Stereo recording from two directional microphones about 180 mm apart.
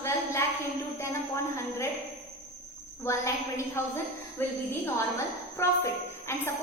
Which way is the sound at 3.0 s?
15° left (ahead or behind).